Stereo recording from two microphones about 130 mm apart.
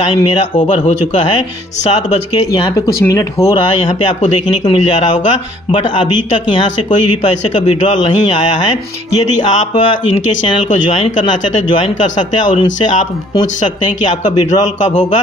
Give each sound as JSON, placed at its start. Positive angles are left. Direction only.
{"t": 0.1, "sound": "speech", "side_deg": 35}
{"t": 3.1, "sound": "speech", "side_deg": 25}
{"t": 4.3, "sound": "speech", "side_deg": 35}
{"t": 14.0, "sound": "speech", "side_deg": 30}